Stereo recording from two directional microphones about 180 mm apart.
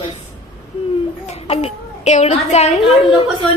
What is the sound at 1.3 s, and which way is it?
A child's voice, 35° left (ahead or behind).